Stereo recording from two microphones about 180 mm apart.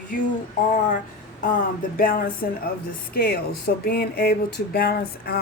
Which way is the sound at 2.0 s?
55° left (ahead or behind).